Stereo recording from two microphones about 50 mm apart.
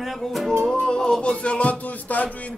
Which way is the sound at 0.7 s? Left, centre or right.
Centre.